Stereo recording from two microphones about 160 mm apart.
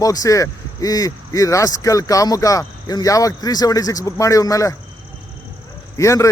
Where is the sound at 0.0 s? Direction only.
20° left (ahead or behind).